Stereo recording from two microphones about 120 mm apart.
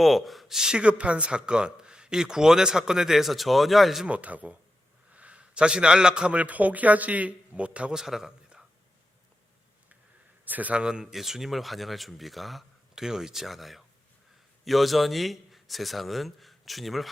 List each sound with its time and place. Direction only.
0.0 s a man's voice: centre (ahead or behind)
10.4 s a man's voice: 15° right (ahead or behind)